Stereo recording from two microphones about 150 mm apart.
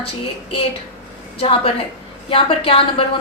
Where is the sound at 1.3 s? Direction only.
35° left (ahead or behind).